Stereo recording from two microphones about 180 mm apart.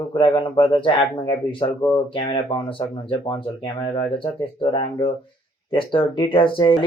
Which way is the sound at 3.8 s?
20° left (ahead or behind).